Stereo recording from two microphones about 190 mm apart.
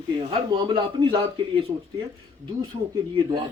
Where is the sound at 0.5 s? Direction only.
25° right (ahead or behind).